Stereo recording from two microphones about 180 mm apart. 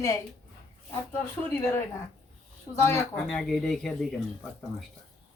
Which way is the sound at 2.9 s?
5° left (ahead or behind).